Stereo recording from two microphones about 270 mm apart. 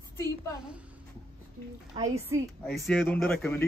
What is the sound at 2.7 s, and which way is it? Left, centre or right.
Speech, centre.